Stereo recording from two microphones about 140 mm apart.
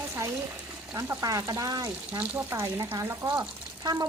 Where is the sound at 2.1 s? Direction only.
15° right (ahead or behind).